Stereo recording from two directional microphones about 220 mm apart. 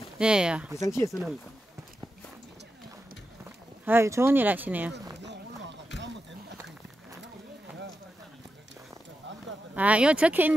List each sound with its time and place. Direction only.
0.2 s speech: 5° right (ahead or behind)
0.7 s speech: 15° left (ahead or behind)
3.8 s speech: 10° right (ahead or behind)
5.2 s a sound: 50° right (ahead or behind)
9.8 s speech: 5° right (ahead or behind)